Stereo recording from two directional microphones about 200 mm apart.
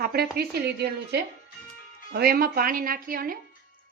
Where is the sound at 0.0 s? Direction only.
50° right (ahead or behind).